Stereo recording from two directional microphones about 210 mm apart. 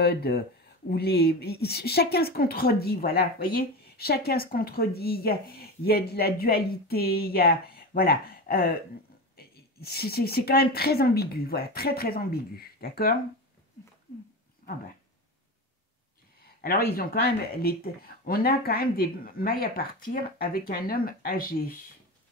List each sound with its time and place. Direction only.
0.0 s a woman's voice: 50° left (ahead or behind)
14.6 s a sound: 40° left (ahead or behind)
16.6 s a woman's voice: 45° left (ahead or behind)